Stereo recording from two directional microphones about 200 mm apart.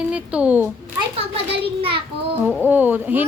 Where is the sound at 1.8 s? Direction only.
25° right (ahead or behind).